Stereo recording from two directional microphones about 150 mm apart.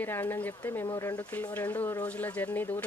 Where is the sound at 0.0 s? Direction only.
15° left (ahead or behind).